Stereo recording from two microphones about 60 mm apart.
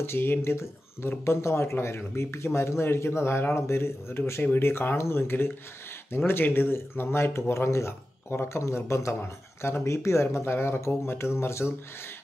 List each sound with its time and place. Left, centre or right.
0.0 s speech: left